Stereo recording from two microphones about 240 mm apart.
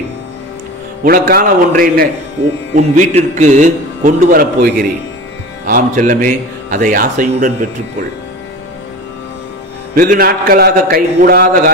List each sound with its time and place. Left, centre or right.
1.0 s a man's voice: right
9.9 s a man's voice: right